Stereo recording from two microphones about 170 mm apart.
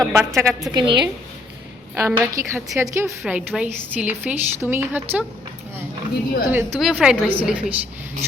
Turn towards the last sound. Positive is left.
turn(degrees=-10)  # may be behind; listen again after turning